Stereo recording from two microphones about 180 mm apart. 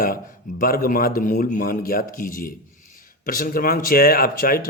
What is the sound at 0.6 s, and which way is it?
A man's voice, 50° left (ahead or behind).